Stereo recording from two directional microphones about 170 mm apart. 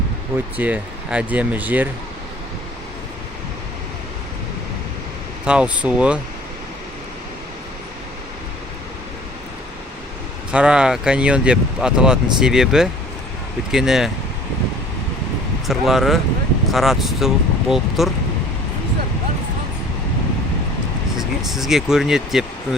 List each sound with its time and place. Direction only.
0.5 s speech: 10° right (ahead or behind)
5.5 s speech: 5° right (ahead or behind)
10.5 s speech: 5° right (ahead or behind)
15.6 s speech: centre (ahead or behind)
21.2 s speech: centre (ahead or behind)